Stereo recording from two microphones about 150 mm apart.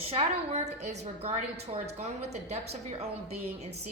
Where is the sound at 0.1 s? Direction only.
50° right (ahead or behind).